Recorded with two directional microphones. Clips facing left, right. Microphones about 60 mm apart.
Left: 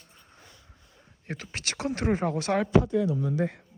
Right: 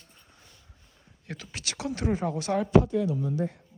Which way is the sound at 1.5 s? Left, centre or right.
Left.